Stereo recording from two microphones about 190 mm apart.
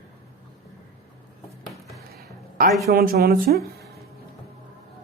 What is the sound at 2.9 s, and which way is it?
Speech, 50° right (ahead or behind).